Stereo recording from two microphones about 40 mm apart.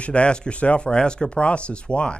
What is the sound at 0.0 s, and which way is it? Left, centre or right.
Speech, left.